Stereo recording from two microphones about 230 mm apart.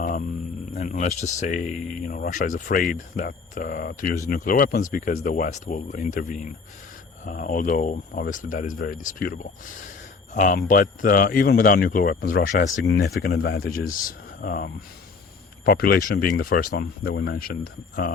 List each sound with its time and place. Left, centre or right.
0.8 s speech: left
13.4 s speech: left
14.4 s speech: left